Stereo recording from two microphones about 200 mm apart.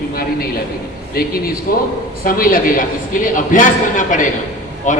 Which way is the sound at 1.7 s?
45° left (ahead or behind).